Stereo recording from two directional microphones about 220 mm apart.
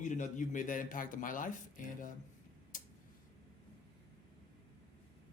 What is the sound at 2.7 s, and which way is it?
Tick-tock, 35° left (ahead or behind).